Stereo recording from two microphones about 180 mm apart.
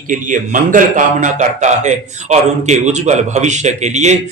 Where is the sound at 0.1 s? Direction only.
45° right (ahead or behind).